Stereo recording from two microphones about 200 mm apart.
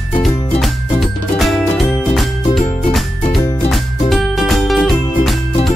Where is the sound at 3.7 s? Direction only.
Centre (ahead or behind).